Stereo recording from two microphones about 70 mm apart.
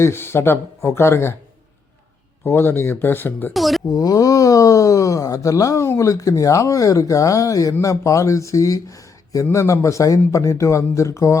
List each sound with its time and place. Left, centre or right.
0.0 s speech: left
2.4 s speech: left
3.5 s speech: centre
3.8 s speech: left